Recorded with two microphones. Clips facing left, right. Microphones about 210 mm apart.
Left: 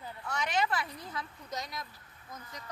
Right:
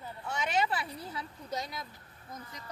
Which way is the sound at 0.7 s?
30° right (ahead or behind).